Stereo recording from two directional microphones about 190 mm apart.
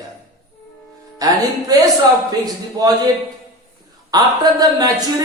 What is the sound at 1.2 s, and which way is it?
A woman's voice, 20° right (ahead or behind).